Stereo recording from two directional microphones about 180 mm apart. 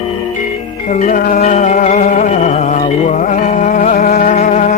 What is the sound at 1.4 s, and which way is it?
Music, 40° left (ahead or behind).